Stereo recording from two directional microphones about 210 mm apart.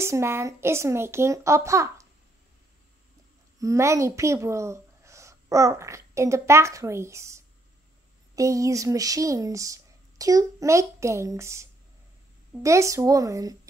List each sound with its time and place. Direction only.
0.0 s speech: 10° right (ahead or behind)
3.5 s speech: 15° right (ahead or behind)